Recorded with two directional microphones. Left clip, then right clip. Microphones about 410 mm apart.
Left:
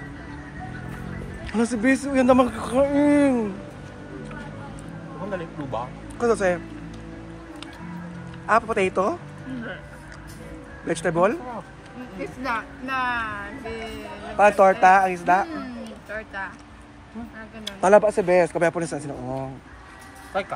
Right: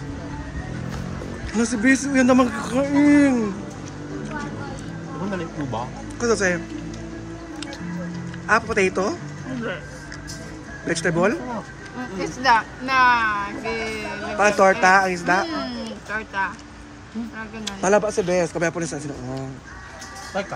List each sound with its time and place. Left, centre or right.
1.5 s speech: centre
5.7 s speech: centre
8.5 s speech: centre
10.9 s speech: centre
12.2 s speech: centre
14.4 s speech: centre
17.6 s speech: centre